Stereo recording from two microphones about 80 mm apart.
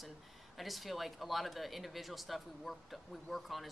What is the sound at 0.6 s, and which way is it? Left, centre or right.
Speech, centre.